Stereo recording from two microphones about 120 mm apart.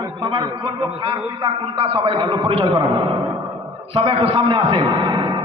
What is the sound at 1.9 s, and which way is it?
A man's voice, 40° right (ahead or behind).